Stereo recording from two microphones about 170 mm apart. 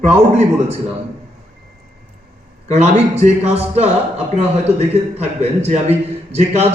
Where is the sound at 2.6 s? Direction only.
40° right (ahead or behind).